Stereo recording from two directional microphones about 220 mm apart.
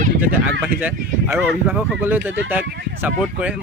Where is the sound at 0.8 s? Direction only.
10° right (ahead or behind).